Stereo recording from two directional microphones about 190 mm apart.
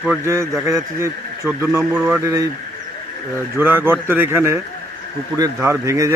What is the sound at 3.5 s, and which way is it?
Speech, 10° right (ahead or behind).